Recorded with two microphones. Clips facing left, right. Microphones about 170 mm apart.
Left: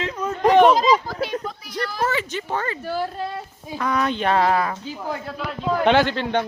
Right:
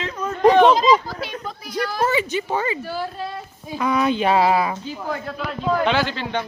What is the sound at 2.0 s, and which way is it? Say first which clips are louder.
Speech: right 3 dB; 10° right (ahead or behind).